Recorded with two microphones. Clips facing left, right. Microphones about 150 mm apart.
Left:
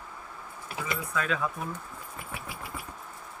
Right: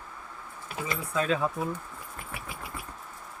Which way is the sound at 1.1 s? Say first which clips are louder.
Right 4 dB; 30° right (ahead or behind).